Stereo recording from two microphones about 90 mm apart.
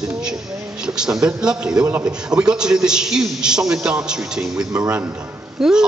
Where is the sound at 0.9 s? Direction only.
10° right (ahead or behind).